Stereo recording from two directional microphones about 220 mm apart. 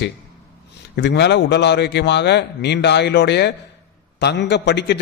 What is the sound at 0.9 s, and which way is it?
A man's voice, 50° left (ahead or behind).